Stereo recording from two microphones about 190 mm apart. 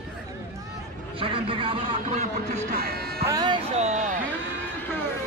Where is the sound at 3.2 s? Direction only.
20° right (ahead or behind).